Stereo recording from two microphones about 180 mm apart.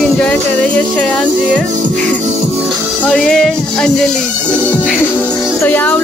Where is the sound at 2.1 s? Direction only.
40° right (ahead or behind).